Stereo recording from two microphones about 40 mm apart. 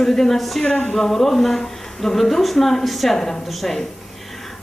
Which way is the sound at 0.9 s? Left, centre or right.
Centre.